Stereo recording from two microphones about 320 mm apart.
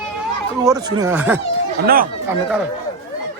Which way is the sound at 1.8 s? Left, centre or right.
Right.